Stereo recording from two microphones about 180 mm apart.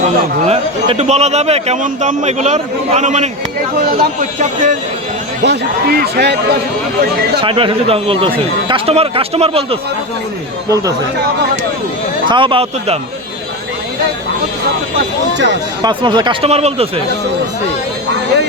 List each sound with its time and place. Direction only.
0.4 s a man's voice: 35° right (ahead or behind)
5.4 s speech: 65° right (ahead or behind)
7.4 s a man's voice: 30° right (ahead or behind)
12.3 s a man's voice: 30° right (ahead or behind)
14.9 s speech: 80° right
15.8 s a man's voice: 25° right (ahead or behind)